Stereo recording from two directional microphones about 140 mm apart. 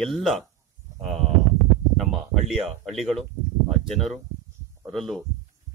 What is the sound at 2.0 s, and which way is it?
Speech, centre (ahead or behind).